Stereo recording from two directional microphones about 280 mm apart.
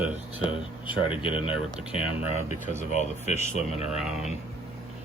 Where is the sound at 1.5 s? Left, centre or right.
Centre.